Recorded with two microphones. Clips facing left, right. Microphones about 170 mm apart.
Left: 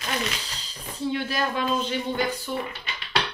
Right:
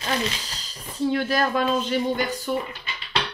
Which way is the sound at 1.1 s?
40° right (ahead or behind).